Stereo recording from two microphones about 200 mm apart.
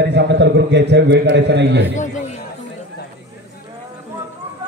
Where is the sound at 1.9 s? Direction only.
40° left (ahead or behind).